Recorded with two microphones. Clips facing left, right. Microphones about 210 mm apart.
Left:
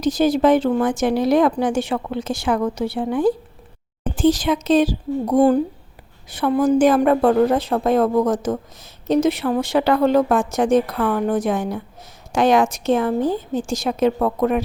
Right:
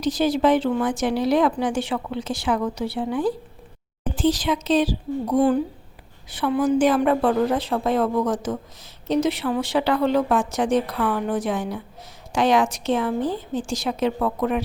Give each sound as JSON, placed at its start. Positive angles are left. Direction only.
{"t": 0.0, "sound": "speech", "side_deg": 45}